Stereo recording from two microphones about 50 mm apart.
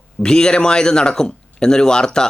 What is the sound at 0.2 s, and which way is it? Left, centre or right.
Speech, centre.